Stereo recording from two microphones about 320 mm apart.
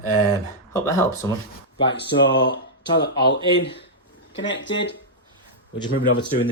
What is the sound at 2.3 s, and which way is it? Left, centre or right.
Speech, centre.